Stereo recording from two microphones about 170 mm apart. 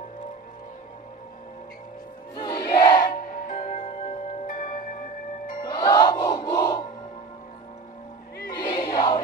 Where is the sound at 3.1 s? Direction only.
50° left (ahead or behind).